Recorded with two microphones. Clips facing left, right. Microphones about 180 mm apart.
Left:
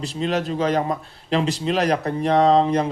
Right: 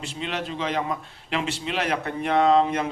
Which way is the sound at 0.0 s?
40° left (ahead or behind).